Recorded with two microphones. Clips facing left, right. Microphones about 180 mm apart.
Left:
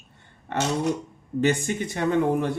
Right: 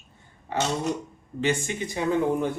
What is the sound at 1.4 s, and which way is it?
Speech, 40° left (ahead or behind).